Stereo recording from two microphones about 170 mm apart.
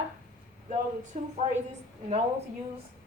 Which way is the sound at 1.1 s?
45° right (ahead or behind).